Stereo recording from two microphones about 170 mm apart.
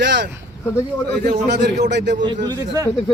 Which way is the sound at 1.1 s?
75° right (ahead or behind).